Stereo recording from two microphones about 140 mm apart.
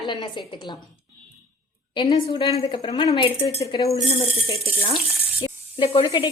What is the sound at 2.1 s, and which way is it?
A woman's voice, 25° left (ahead or behind).